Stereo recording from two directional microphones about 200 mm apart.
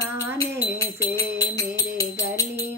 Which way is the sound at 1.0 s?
15° left (ahead or behind).